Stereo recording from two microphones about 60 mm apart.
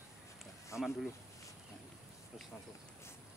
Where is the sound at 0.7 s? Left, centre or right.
Left.